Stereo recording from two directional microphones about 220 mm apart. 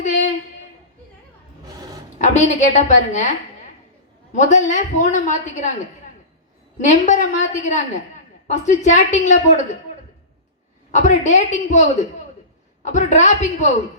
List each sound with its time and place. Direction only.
0.0 s a sound: 35° left (ahead or behind)
2.1 s a woman's voice: 35° left (ahead or behind)
4.3 s a woman's voice: 35° left (ahead or behind)
6.8 s a woman's voice: 35° left (ahead or behind)
10.9 s a woman's voice: 35° left (ahead or behind)